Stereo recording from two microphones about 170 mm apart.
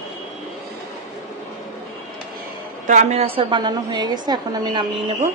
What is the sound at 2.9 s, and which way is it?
A woman's voice, 45° right (ahead or behind).